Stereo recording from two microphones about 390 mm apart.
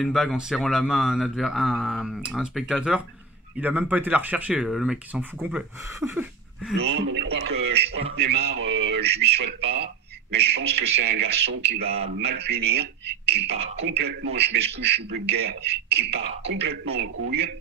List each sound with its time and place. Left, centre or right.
0.0 s speech: centre
6.8 s a man's voice: right
13.8 s a man's voice: right